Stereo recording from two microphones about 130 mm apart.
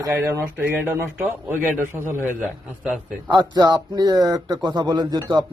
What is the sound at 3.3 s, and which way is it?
Speech, 30° right (ahead or behind).